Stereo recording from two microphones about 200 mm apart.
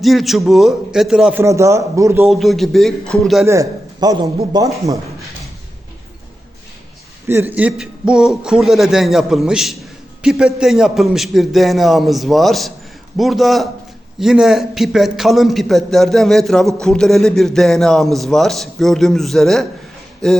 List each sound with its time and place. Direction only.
0.0 s a man's voice: centre (ahead or behind)
2.2 s a man's voice: centre (ahead or behind)
3.4 s a man's voice: 15° right (ahead or behind)
7.3 s a man's voice: 10° right (ahead or behind)